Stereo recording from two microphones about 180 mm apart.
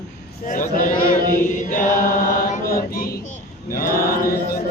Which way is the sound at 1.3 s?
45° left (ahead or behind).